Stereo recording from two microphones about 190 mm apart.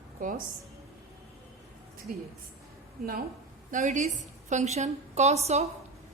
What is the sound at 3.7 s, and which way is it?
A woman's voice, 40° right (ahead or behind).